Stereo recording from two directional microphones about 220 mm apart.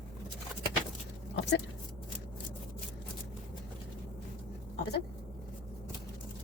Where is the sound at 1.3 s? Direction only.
55° left (ahead or behind).